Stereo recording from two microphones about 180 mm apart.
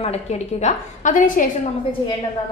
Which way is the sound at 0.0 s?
35° left (ahead or behind).